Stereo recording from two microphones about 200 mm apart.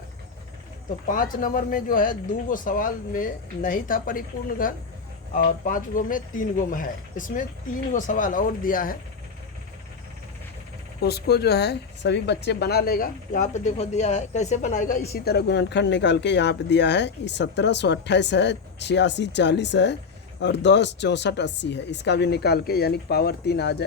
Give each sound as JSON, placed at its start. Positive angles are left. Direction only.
{"t": 1.0, "sound": "speech", "side_deg": 40}
{"t": 11.0, "sound": "speech", "side_deg": 55}
{"t": 15.1, "sound": "speech", "side_deg": 50}